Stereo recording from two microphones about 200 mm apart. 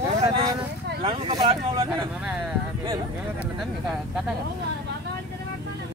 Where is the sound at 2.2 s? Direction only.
5° right (ahead or behind).